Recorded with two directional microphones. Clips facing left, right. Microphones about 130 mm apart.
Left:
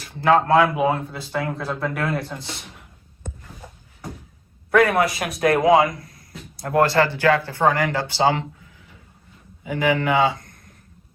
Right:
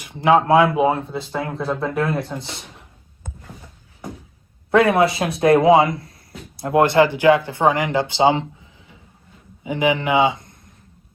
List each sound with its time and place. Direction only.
0.0 s speech: 20° right (ahead or behind)
4.7 s speech: 25° right (ahead or behind)
9.6 s a man's voice: 20° right (ahead or behind)